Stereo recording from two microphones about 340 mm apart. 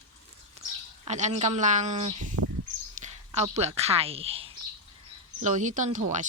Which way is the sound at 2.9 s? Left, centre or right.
Centre.